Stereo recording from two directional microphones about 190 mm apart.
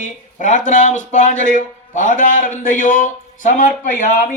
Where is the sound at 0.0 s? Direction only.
40° left (ahead or behind).